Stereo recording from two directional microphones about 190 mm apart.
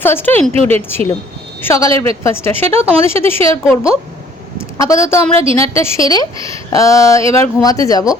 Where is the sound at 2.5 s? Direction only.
30° right (ahead or behind).